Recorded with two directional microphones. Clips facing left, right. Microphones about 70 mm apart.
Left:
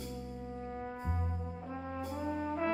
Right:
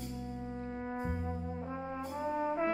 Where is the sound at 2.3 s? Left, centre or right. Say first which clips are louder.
Right 2 dB; centre.